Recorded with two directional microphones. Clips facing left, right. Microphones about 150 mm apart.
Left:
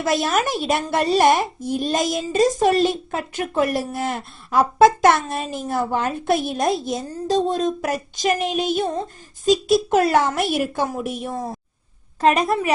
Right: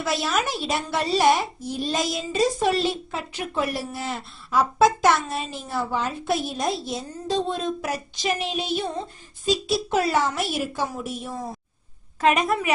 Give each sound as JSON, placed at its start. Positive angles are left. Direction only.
{"t": 0.0, "sound": "a woman's voice", "side_deg": 50}
{"t": 12.2, "sound": "a woman's voice", "side_deg": 35}